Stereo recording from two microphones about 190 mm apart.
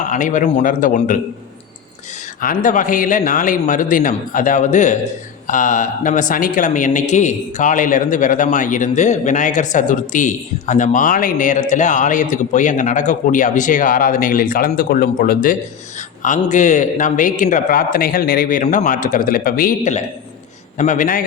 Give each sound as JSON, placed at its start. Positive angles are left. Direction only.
{"t": 0.0, "sound": "a man's voice", "side_deg": 40}
{"t": 2.4, "sound": "a man's voice", "side_deg": 45}